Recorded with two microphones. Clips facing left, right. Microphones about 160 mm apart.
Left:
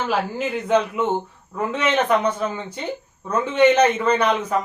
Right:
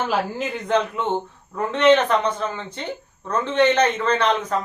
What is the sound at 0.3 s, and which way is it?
A man's voice, 10° left (ahead or behind).